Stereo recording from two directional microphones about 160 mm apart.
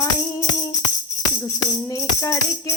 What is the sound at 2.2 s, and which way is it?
Music, 20° left (ahead or behind).